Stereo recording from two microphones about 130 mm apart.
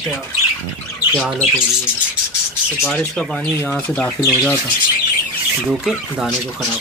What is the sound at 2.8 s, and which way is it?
Speech, 5° left (ahead or behind).